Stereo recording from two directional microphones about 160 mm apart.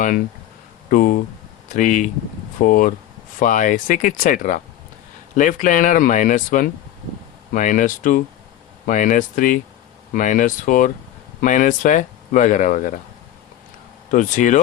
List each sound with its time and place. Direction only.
0.9 s speech: 55° left (ahead or behind)
14.1 s speech: 50° left (ahead or behind)